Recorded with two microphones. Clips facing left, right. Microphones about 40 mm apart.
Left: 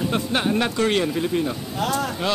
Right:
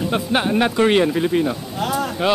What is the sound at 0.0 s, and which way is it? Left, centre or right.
Speech, centre.